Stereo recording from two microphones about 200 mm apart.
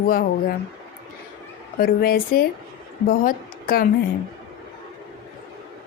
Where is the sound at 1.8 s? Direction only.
45° left (ahead or behind).